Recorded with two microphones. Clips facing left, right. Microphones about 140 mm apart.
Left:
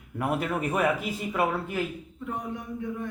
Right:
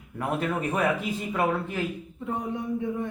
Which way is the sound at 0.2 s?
10° left (ahead or behind).